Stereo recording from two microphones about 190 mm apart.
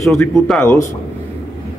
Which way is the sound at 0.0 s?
Centre (ahead or behind).